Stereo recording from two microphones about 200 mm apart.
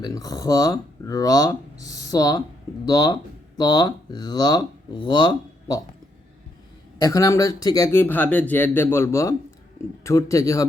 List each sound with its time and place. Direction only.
0.0 s speech: 20° left (ahead or behind)
7.0 s speech: 15° left (ahead or behind)